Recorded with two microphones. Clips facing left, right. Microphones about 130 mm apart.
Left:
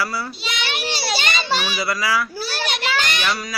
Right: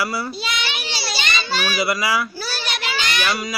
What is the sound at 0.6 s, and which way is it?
Child singing, 55° left (ahead or behind).